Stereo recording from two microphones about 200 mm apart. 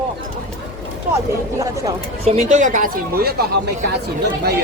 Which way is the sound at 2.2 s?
35° right (ahead or behind).